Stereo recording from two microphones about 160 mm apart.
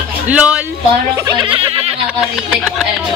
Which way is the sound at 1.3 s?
30° right (ahead or behind).